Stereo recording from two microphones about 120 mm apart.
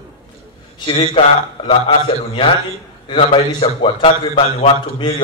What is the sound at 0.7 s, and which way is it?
A man's voice, 40° left (ahead or behind).